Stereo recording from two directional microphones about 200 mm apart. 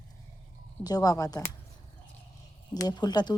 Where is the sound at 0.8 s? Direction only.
20° left (ahead or behind).